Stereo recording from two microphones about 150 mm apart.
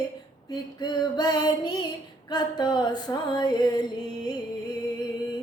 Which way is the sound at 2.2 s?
25° left (ahead or behind).